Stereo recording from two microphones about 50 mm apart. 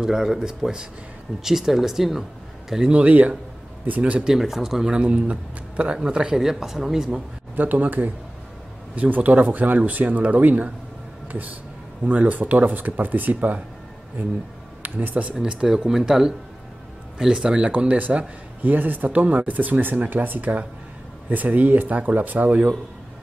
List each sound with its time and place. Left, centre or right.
0.0 s speech: centre
2.9 s a man's voice: right
4.3 s speech: centre
4.9 s a man's voice: right; by 7.2 s centre
7.5 s a man's voice: right
12.0 s a man's voice: right
15.4 s a man's voice: centre
15.9 s speech: centre
17.6 s a man's voice: right